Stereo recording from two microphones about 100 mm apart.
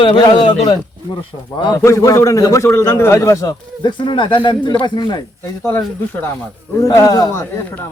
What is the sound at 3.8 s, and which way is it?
Speech, 50° left (ahead or behind).